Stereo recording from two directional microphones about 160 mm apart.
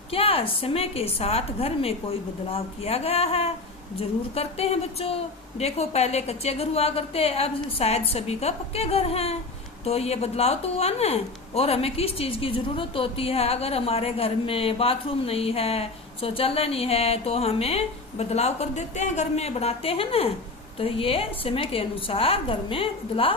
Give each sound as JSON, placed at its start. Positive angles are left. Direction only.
{"t": 0.1, "sound": "a woman's voice", "side_deg": 35}